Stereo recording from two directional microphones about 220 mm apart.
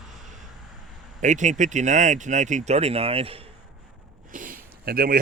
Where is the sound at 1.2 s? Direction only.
35° right (ahead or behind).